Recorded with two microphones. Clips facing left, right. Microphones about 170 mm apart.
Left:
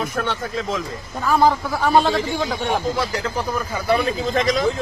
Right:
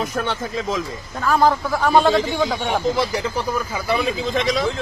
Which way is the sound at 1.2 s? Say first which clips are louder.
Even; 10° left (ahead or behind).